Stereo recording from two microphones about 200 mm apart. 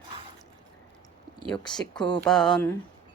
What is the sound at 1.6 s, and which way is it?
Speech, 20° left (ahead or behind).